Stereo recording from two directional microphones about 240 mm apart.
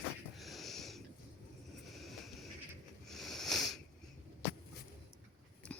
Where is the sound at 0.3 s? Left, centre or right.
Centre.